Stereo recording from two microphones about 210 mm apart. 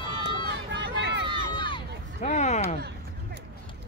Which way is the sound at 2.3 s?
35° left (ahead or behind).